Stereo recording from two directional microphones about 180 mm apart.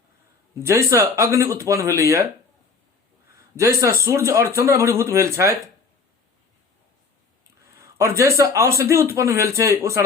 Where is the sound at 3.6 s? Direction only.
15° right (ahead or behind).